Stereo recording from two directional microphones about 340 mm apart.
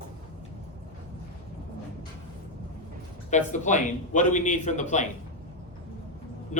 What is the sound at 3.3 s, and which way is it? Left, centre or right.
Speech, left.